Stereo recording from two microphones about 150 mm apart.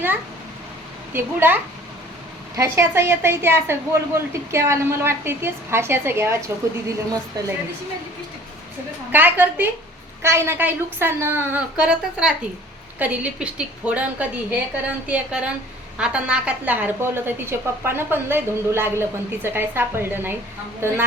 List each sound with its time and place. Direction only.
1.1 s a woman's voice: 15° right (ahead or behind)
2.6 s a woman's voice: 20° right (ahead or behind)
9.1 s a woman's voice: 15° right (ahead or behind)